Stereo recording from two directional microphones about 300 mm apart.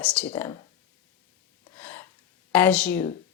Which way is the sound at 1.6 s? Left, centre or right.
Centre.